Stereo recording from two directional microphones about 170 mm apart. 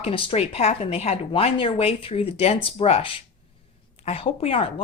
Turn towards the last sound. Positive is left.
turn(degrees=35)  # may be behind; listen again after turning